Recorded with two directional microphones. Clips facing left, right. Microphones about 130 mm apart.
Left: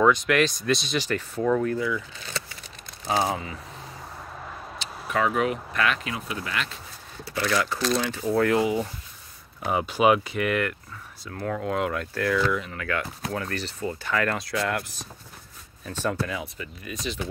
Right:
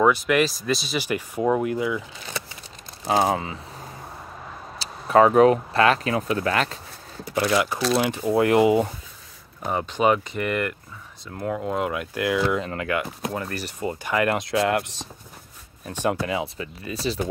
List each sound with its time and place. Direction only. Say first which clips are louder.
0.0 s speech: right 1 dB; 5° right (ahead or behind)
3.1 s speech: right 4 dB; 50° right (ahead or behind)
4.7 s speech: right 10 dB; 35° right (ahead or behind)
7.2 s speech: right 4 dB; 20° right (ahead or behind)
7.8 s speech: right 3 dB; 5° right (ahead or behind)
8.1 s speech: right 2 dB; 20° right (ahead or behind)
9.7 s speech: even; 10° left (ahead or behind)
11.3 s speech: right 2 dB; 15° right (ahead or behind)
11.6 s speech: left 1 dB; 5° right (ahead or behind); by 15.0 s 25° right (ahead or behind)
15.8 s speech: right 3 dB; 15° right (ahead or behind)
16.8 s speech: right 6 dB; 35° right (ahead or behind)